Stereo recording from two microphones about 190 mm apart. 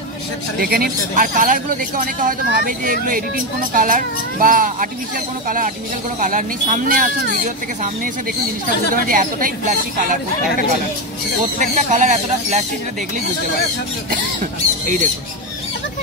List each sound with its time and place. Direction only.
0.6 s speech: 55° right (ahead or behind)
6.1 s speech: 45° right (ahead or behind)
8.9 s speech: 45° right (ahead or behind)
11.6 s speech: 40° right (ahead or behind)